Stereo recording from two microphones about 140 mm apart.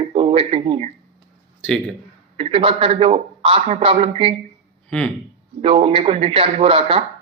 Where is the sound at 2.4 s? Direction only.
45° right (ahead or behind).